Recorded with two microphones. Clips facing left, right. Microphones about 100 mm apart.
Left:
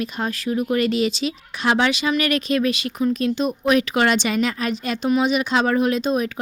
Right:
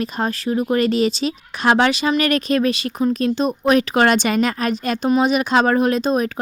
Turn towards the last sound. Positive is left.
turn(degrees=-40)  # may be behind; listen again after turning